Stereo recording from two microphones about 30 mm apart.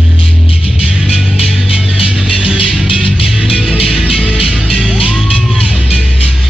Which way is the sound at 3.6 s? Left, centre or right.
Right.